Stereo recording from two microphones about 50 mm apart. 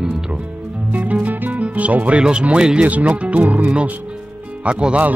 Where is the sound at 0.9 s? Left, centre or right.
Right.